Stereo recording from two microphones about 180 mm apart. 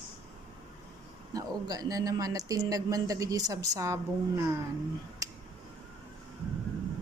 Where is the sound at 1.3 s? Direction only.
20° right (ahead or behind).